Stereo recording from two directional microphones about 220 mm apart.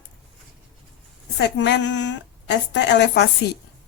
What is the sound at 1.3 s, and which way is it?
A woman's voice, 50° left (ahead or behind).